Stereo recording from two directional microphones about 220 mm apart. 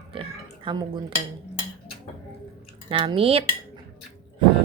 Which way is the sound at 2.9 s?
25° right (ahead or behind).